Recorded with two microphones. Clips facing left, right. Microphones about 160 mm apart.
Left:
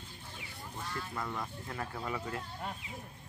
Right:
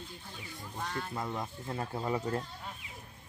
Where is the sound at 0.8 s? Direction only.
55° right (ahead or behind).